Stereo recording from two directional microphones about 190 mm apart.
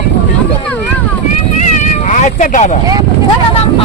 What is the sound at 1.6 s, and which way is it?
Cat, 40° left (ahead or behind).